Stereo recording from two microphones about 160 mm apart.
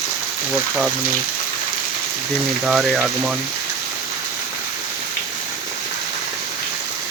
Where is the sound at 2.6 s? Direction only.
Centre (ahead or behind).